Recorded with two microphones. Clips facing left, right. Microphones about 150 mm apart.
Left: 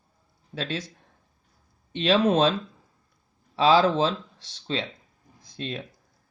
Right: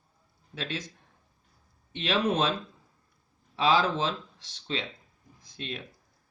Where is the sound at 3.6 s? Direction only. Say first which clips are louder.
Left 5 dB; 35° left (ahead or behind).